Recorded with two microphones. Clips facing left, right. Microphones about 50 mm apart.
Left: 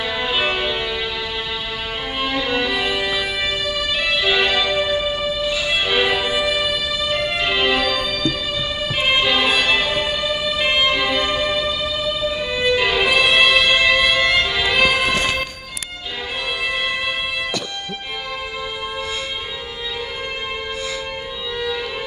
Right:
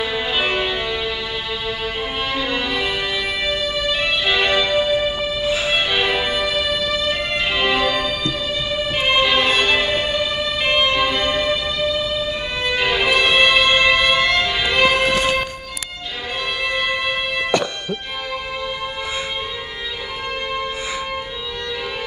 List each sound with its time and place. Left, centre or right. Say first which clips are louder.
0.0 s music: even; centre
2.2 s music: left 3 dB; centre
5.4 s music: right 4 dB; right
5.8 s violin: left 1 dB; centre
6.1 s music: even; centre
7.8 s music: right 1 dB; centre
8.9 s music: right 1 dB; centre
12.5 s violin: left 2 dB; centre